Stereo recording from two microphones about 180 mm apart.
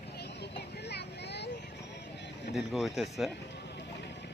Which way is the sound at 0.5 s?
70° left (ahead or behind).